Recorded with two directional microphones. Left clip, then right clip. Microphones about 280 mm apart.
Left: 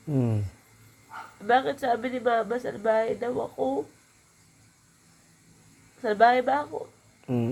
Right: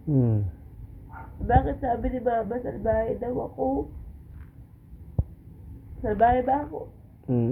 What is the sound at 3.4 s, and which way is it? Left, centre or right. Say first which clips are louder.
Speech: even; left.